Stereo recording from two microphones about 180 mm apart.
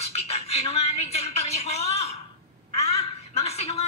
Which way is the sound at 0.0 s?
35° left (ahead or behind).